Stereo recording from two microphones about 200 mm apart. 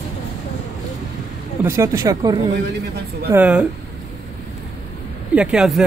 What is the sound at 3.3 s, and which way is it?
Speech, 5° right (ahead or behind).